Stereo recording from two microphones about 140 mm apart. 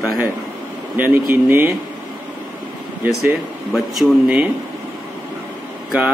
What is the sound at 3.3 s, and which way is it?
A man's voice, 10° right (ahead or behind).